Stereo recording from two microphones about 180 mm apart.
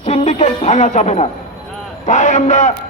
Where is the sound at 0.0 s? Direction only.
40° left (ahead or behind).